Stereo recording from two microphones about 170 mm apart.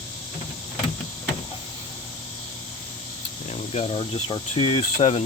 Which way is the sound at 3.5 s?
40° left (ahead or behind).